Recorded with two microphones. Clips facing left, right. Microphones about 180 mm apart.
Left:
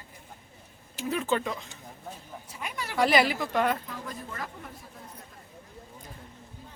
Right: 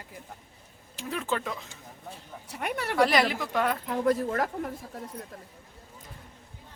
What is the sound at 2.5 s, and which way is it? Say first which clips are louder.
Speech: right 7 dB; 65° right (ahead or behind).